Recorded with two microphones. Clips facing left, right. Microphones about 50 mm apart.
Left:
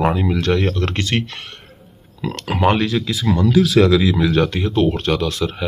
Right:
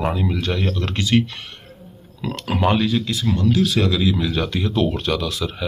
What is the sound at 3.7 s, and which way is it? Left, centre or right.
Speech, left.